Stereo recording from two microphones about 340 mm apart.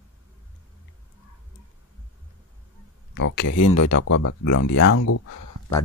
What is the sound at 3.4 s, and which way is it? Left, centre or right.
Speech, left.